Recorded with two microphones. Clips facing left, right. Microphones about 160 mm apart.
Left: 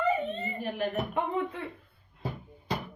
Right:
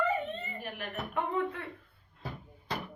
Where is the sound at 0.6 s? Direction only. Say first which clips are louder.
Left 8 dB; 25° left (ahead or behind).